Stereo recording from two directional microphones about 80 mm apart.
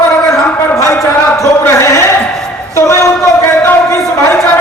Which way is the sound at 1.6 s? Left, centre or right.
Left.